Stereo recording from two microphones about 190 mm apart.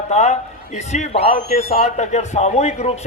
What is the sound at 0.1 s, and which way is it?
A man's voice, 35° left (ahead or behind).